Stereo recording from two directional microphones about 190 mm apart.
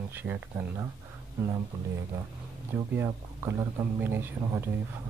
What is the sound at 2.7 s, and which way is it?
Speech, 15° right (ahead or behind).